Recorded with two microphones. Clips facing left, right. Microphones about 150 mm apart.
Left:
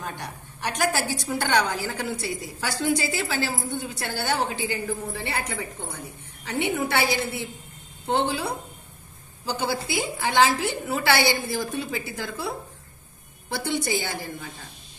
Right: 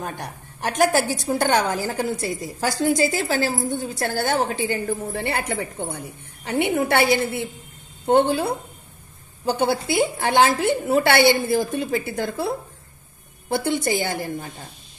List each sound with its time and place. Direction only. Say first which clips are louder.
0.0 s a woman's voice: right 3 dB; 50° right (ahead or behind)
9.5 s a woman's voice: right 6 dB; 55° right (ahead or behind)